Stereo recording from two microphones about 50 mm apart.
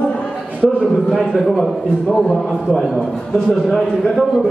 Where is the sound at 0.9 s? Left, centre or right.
Centre.